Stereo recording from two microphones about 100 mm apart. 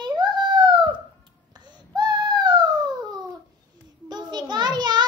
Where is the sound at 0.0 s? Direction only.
50° right (ahead or behind).